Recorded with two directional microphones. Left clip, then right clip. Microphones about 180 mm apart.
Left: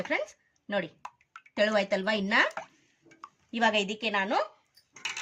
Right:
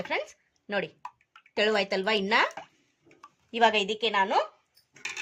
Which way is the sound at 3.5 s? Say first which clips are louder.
Right 3 dB; 25° right (ahead or behind).